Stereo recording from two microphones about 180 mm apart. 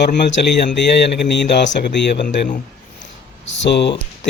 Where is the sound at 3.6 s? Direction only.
75° left (ahead or behind).